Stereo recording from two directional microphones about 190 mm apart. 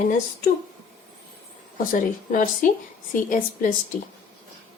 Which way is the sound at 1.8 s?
45° left (ahead or behind).